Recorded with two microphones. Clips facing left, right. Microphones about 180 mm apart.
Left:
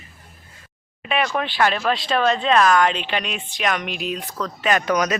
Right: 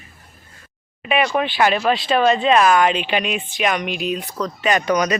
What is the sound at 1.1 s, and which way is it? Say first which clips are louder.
Speech: right 4 dB; 5° right (ahead or behind).